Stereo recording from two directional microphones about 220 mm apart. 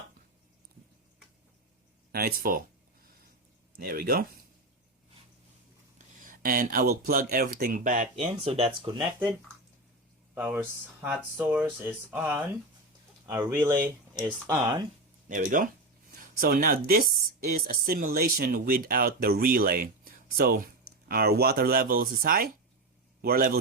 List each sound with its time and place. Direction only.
2.1 s speech: 45° right (ahead or behind)
3.8 s speech: 45° right (ahead or behind)
6.1 s speech: 40° right (ahead or behind)
8.2 s speech: 25° right (ahead or behind)
10.3 s speech: 5° right (ahead or behind)
15.3 s speech: 35° right (ahead or behind)